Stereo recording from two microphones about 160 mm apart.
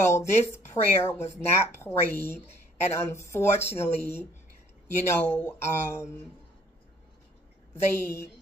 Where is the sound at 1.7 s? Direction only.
15° left (ahead or behind).